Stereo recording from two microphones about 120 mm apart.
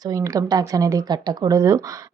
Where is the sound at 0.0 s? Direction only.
30° right (ahead or behind).